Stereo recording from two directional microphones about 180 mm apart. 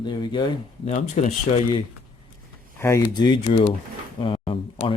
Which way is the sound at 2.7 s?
15° left (ahead or behind).